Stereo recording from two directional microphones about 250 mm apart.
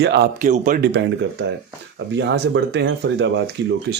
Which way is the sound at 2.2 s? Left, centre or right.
Right.